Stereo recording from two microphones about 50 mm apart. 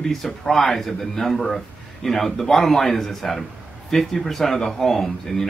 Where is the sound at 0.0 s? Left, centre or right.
Centre.